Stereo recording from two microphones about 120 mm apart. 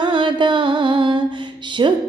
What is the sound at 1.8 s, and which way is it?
Music, 40° right (ahead or behind).